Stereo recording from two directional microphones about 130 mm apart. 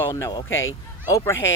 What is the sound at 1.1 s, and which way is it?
Speech, 20° left (ahead or behind).